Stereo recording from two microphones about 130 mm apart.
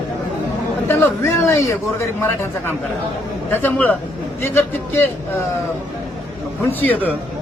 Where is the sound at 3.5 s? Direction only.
15° left (ahead or behind).